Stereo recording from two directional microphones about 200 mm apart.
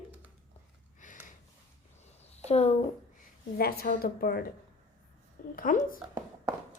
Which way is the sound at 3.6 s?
50° left (ahead or behind).